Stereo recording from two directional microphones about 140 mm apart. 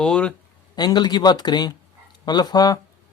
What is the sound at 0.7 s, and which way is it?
Speech, 30° left (ahead or behind).